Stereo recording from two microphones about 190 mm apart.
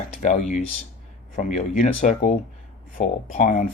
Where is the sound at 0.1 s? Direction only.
40° left (ahead or behind).